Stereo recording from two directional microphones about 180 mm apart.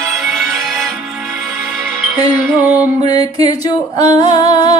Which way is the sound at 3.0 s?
20° left (ahead or behind).